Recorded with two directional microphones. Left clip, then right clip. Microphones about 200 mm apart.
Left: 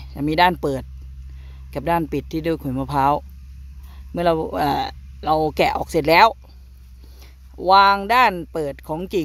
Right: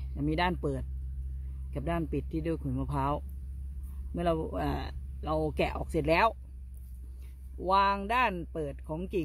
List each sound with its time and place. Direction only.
0.0 s speech: 30° left (ahead or behind)
7.6 s speech: 30° left (ahead or behind)